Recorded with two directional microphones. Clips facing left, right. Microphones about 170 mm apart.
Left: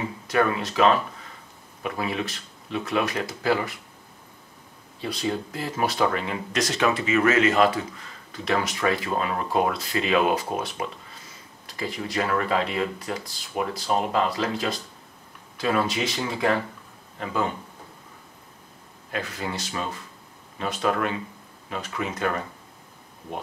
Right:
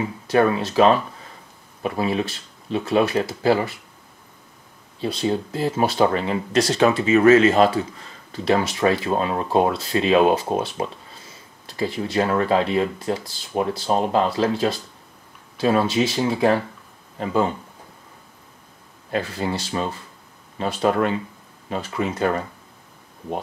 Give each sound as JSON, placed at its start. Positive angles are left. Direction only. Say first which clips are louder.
{"t": 0.3, "sound": "speech", "louder": "right 5 dB", "side_deg": -30}
{"t": 5.0, "sound": "speech", "louder": "right 5 dB", "side_deg": -25}
{"t": 19.1, "sound": "speech", "louder": "right 6 dB", "side_deg": -30}